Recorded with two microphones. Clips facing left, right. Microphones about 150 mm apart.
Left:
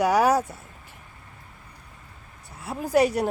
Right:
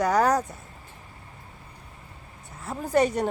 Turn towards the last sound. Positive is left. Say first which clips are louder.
# left 2 dB
turn(degrees=5)  # may be behind; listen again after turning